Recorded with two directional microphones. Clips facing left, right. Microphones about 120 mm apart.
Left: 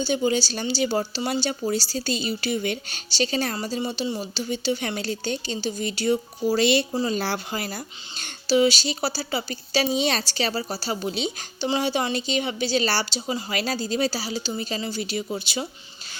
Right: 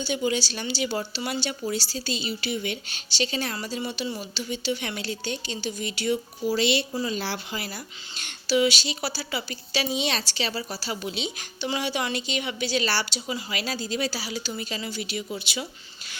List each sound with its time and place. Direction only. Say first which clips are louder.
0.0 s speech: left 4 dB; 35° left (ahead or behind)